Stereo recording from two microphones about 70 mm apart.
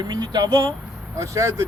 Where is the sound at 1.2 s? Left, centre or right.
Right.